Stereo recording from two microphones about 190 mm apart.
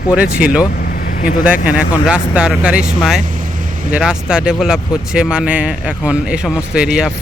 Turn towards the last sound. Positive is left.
turn(degrees=-5)  # may be behind; listen again after turning